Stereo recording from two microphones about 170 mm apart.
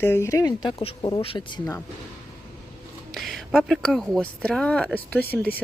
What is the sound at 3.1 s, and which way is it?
Speech, centre (ahead or behind).